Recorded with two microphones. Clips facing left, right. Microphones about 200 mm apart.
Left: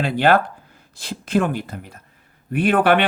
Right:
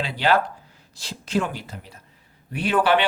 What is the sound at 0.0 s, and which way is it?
Speech, 55° left (ahead or behind).